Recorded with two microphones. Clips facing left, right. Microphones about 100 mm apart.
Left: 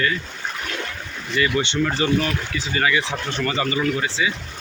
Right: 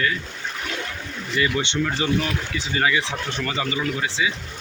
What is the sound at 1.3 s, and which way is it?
Speech, 20° right (ahead or behind).